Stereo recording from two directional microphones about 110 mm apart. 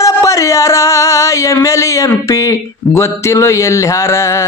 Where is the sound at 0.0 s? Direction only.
30° left (ahead or behind).